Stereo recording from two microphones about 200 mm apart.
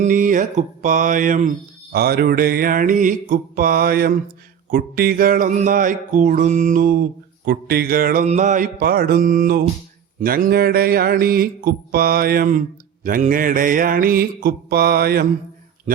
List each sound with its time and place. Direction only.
0.0 s music: 40° right (ahead or behind)